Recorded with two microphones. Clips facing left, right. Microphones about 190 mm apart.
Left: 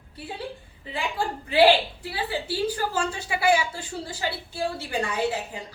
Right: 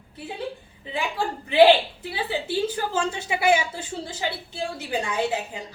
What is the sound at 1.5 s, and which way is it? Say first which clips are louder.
A woman's voice: right 3 dB; 20° right (ahead or behind).